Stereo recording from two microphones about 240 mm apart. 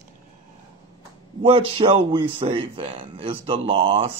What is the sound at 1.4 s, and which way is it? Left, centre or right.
Speech, right.